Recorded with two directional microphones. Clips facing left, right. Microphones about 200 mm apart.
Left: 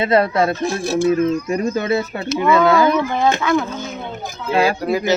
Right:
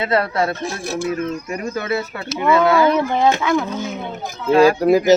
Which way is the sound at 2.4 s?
25° right (ahead or behind).